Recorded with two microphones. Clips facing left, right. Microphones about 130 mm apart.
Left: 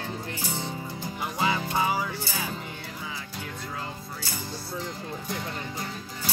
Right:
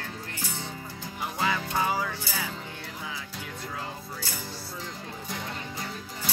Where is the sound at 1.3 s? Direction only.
20° left (ahead or behind).